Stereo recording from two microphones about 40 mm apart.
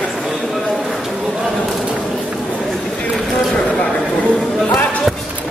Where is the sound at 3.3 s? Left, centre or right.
Left.